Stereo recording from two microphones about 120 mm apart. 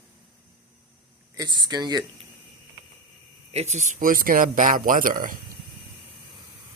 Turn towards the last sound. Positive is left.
turn(degrees=-90)